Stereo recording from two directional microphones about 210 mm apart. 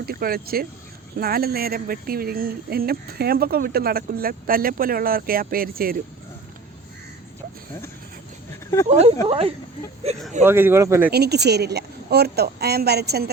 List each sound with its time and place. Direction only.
0.0 s speech: 45° right (ahead or behind)
8.9 s speech: 30° right (ahead or behind)
10.4 s speech: 10° right (ahead or behind)
11.1 s speech: 50° right (ahead or behind)